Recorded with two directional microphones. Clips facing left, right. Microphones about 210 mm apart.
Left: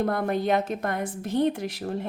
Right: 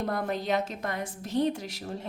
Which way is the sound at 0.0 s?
55° left (ahead or behind).